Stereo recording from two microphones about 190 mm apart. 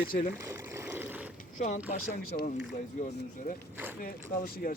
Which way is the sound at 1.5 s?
40° left (ahead or behind).